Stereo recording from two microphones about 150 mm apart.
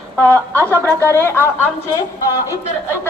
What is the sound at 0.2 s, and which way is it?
Speech, 10° left (ahead or behind).